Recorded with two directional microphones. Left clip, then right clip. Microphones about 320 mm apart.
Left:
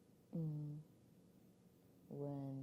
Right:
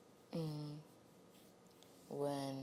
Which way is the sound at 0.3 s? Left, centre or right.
Centre.